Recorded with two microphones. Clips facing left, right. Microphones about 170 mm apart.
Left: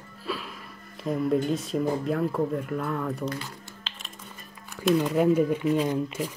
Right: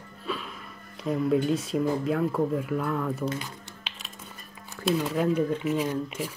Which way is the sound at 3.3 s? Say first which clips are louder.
Right 1 dB; 15° right (ahead or behind).